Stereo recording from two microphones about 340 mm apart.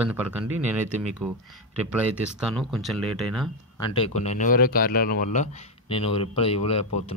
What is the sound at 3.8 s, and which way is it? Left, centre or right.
Speech, centre.